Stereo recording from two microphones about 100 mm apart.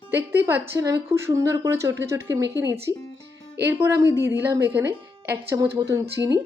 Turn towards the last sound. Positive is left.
turn(degrees=-35)  # may be behind; listen again after turning